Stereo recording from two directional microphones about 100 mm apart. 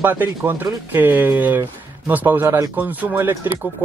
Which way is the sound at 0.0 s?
20° right (ahead or behind).